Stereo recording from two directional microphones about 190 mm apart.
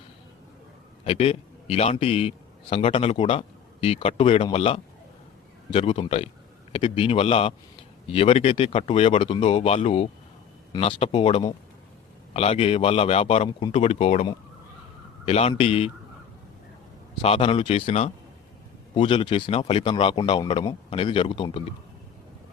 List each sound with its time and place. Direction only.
1.0 s a man's voice: 30° left (ahead or behind)
15.3 s speech: 35° left (ahead or behind)
17.2 s speech: 30° left (ahead or behind)